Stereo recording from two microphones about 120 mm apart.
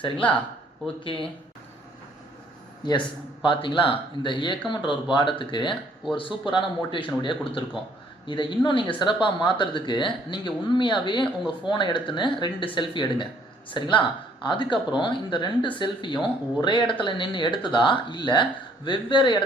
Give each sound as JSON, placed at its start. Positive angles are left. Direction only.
{"t": 0.0, "sound": "a man's voice", "side_deg": 45}
{"t": 3.4, "sound": "a man's voice", "side_deg": 45}